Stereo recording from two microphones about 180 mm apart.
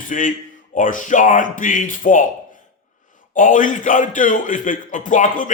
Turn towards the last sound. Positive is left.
turn(degrees=45)  # may be behind; listen again after turning